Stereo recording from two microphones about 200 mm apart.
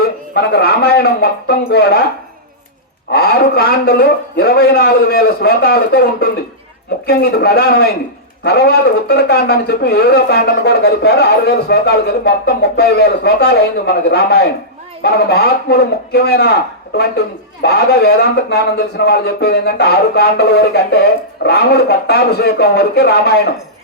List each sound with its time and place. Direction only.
0.0 s speech: 50° left (ahead or behind)
3.1 s speech: 50° left (ahead or behind)